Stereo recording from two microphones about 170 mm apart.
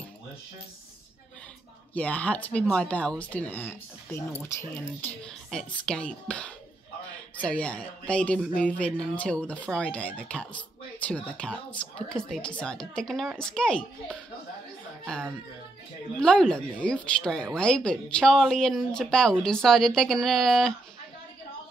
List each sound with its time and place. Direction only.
2.0 s speech: 10° left (ahead or behind)